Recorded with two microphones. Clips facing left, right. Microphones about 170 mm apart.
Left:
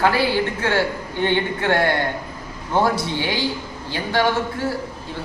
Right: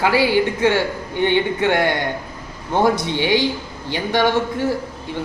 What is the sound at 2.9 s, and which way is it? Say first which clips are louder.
Speech: right 5 dB; 20° right (ahead or behind).